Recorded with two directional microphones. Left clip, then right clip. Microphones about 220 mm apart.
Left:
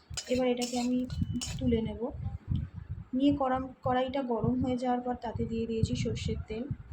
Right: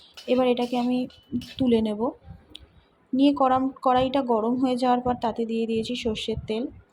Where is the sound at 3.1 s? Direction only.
30° right (ahead or behind).